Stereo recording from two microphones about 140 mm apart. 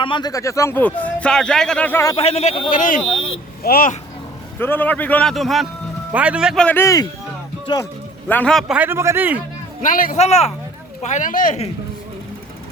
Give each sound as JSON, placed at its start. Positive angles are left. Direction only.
{"t": 0.0, "sound": "speech", "side_deg": 35}
{"t": 2.1, "sound": "speech", "side_deg": 50}
{"t": 3.6, "sound": "speech", "side_deg": 90}
{"t": 4.6, "sound": "speech", "side_deg": 15}
{"t": 5.3, "sound": "a man's voice", "side_deg": 0}
{"t": 6.6, "sound": "speech", "side_deg": 10}
{"t": 6.8, "sound": "a man's voice", "side_deg": 25}
{"t": 8.3, "sound": "a man's voice", "side_deg": 10}
{"t": 9.8, "sound": "speech", "side_deg": 75}
{"t": 10.2, "sound": "speech", "side_deg": 50}
{"t": 11.0, "sound": "speech", "side_deg": 60}